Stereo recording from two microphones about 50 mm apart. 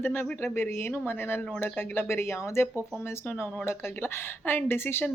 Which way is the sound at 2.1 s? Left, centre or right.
Left.